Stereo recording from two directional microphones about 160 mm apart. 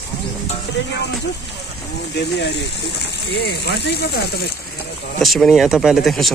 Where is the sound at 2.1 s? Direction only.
90° left.